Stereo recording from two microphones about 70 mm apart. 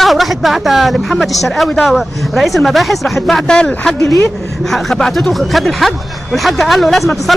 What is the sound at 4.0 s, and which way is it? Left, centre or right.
Speech, left.